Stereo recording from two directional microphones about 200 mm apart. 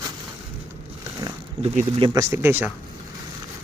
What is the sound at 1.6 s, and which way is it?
Speech, 30° right (ahead or behind).